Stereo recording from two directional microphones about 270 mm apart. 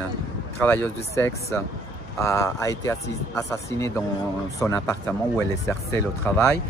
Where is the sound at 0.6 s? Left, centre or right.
Centre.